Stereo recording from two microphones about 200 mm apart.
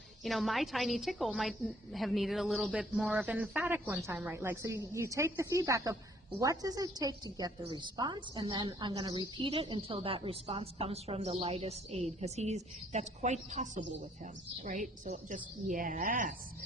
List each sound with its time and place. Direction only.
0.2 s a woman's voice: centre (ahead or behind); by 16.3 s 40° right (ahead or behind)